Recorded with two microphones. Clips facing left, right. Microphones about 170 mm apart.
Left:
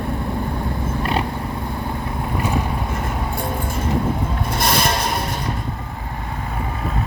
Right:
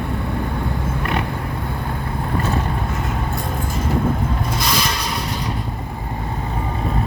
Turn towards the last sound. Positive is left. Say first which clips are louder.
# left 3 dB
turn(degrees=55)  # may be behind; listen again after turning